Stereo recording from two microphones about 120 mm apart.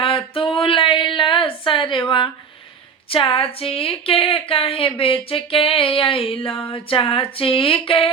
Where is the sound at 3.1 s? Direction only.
50° left (ahead or behind).